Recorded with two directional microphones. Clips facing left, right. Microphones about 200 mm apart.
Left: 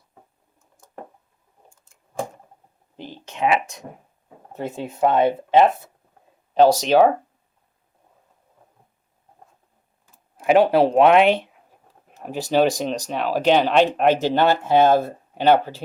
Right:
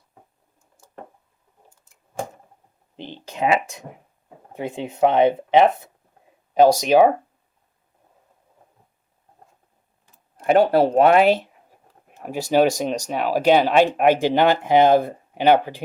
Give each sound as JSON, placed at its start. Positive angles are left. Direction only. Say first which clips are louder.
{"t": 2.9, "sound": "a sound", "louder": "right 1 dB", "side_deg": -25}
{"t": 3.2, "sound": "speech", "louder": "even", "side_deg": -35}
{"t": 4.5, "sound": "speech", "louder": "right 1 dB", "side_deg": -15}
{"t": 10.3, "sound": "speech", "louder": "even", "side_deg": 5}